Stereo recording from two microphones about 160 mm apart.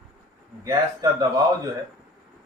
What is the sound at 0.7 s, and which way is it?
A man's voice, 25° right (ahead or behind).